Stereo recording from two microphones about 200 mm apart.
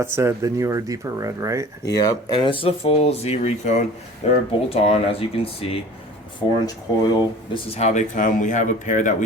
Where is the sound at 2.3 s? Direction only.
25° left (ahead or behind).